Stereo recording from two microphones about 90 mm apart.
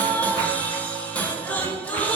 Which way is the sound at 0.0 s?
15° left (ahead or behind).